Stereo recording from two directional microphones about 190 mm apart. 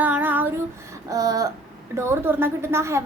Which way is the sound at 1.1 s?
20° right (ahead or behind).